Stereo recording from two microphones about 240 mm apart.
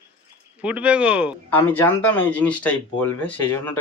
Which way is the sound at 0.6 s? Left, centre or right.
Centre.